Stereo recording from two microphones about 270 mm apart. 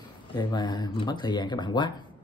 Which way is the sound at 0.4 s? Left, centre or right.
Centre.